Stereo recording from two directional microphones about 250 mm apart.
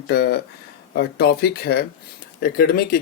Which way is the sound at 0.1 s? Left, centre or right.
Left.